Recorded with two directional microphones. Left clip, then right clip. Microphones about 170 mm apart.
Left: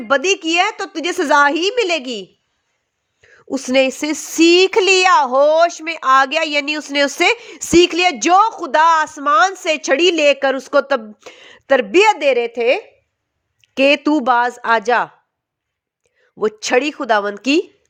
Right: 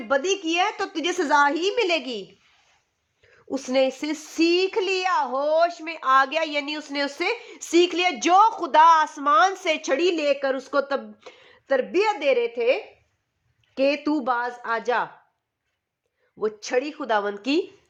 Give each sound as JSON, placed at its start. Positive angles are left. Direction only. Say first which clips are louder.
{"t": 0.1, "sound": "a woman's voice", "louder": "left 8 dB", "side_deg": 35}
{"t": 3.2, "sound": "a child's voice", "louder": "left 6 dB", "side_deg": 35}
{"t": 16.4, "sound": "speech", "louder": "left 9 dB", "side_deg": 45}
{"t": 17.1, "sound": "a woman's voice", "louder": "left 6 dB", "side_deg": 30}